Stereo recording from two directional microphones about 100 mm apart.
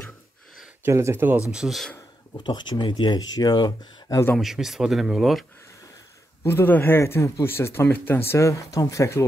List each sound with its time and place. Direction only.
0.8 s speech: 25° right (ahead or behind)
1.5 s speech: 5° right (ahead or behind)
2.3 s speech: 50° left (ahead or behind)
4.4 s speech: 5° right (ahead or behind)
6.4 s speech: 20° left (ahead or behind)